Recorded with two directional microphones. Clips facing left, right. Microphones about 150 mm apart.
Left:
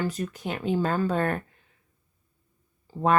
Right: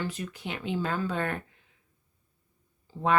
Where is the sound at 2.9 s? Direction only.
45° left (ahead or behind).